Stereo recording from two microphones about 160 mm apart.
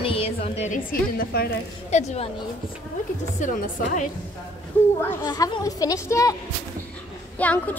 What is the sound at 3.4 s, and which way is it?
Speech, 50° left (ahead or behind).